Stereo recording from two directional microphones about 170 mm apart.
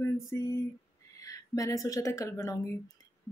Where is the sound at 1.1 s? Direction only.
20° left (ahead or behind).